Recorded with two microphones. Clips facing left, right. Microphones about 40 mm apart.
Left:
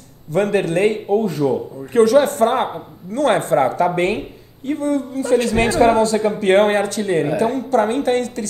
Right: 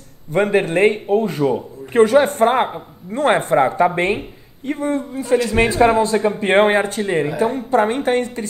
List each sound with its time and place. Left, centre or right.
0.3 s a man's voice: right
5.5 s a man's voice: centre